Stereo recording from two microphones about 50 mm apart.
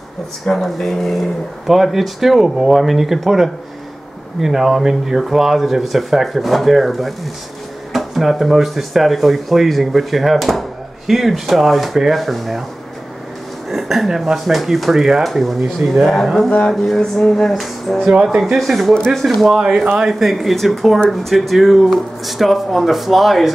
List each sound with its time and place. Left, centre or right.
0.5 s speech: centre
13.7 s speech: centre
16.4 s speech: centre
16.7 s speech: centre
18.1 s speech: right
18.6 s speech: centre
18.9 s speech: centre
19.2 s speech: centre